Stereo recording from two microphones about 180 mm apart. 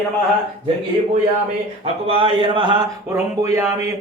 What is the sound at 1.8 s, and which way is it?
Speech, 30° right (ahead or behind).